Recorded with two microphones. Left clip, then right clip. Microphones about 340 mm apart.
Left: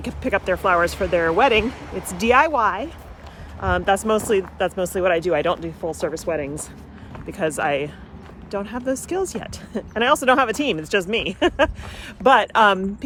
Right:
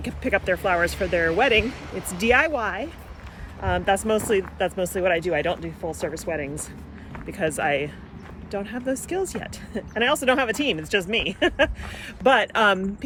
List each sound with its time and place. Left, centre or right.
0.0 s speech: centre
1.6 s speech: left
2.2 s speech: centre